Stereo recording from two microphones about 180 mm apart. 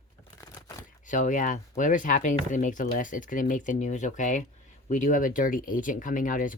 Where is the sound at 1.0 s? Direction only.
45° left (ahead or behind).